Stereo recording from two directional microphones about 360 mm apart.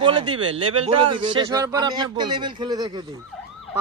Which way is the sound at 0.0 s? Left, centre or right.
Centre.